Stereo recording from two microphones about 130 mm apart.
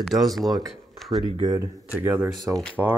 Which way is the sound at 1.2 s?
35° right (ahead or behind).